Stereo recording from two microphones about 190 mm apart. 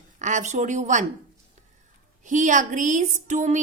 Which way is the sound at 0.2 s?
40° right (ahead or behind).